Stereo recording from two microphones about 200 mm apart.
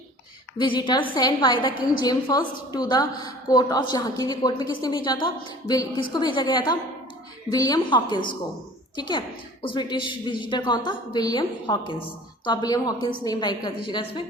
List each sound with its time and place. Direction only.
0.6 s a woman's voice: 25° left (ahead or behind)